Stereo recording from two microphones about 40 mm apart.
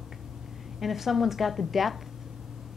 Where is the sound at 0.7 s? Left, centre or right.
Centre.